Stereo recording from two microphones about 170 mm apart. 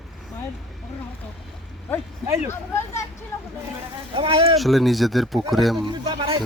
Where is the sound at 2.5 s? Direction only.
15° left (ahead or behind).